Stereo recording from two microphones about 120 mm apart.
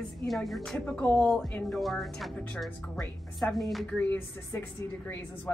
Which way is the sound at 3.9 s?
15° left (ahead or behind).